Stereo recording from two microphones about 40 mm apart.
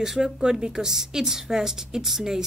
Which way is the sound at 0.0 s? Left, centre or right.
Centre.